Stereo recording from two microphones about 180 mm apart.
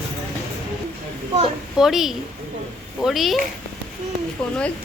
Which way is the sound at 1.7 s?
Centre (ahead or behind).